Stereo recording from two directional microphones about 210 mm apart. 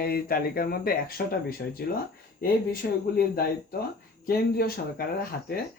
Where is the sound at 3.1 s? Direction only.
50° left (ahead or behind).